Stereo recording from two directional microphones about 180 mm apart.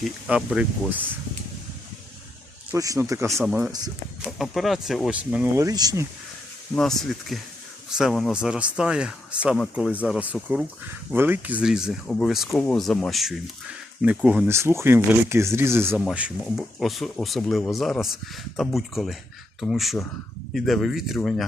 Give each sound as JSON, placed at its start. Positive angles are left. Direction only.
{"t": 0.3, "sound": "speech", "side_deg": -5}
{"t": 2.7, "sound": "speech", "side_deg": -20}
{"t": 3.2, "sound": "speech", "side_deg": 0}
{"t": 5.6, "sound": "speech", "side_deg": -20}
{"t": 6.7, "sound": "speech", "side_deg": 0}